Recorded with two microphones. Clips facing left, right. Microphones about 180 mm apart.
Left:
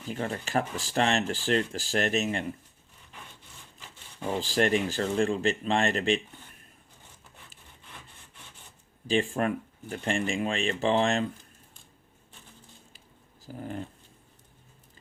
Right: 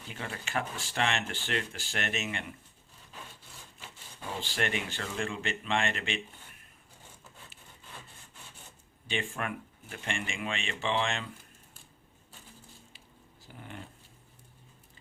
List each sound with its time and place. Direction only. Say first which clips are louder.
0.1 s speech: left 7 dB; 40° left (ahead or behind)
4.4 s speech: left 8 dB; 35° left (ahead or behind)
9.0 s speech: left 9 dB; 35° left (ahead or behind)
13.5 s speech: left 10 dB; 40° left (ahead or behind)